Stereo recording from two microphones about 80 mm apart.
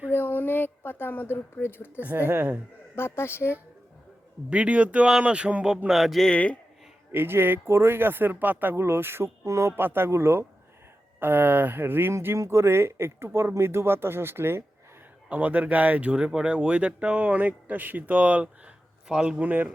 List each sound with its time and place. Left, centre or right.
0.1 s a sound: left
2.0 s speech: right
2.9 s speech: left
4.4 s speech: centre
6.3 s a man's voice: centre
7.1 s speech: right
9.8 s speech: right